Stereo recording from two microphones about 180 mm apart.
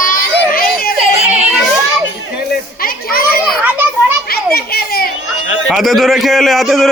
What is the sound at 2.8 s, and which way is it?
Children playing, 55° left (ahead or behind).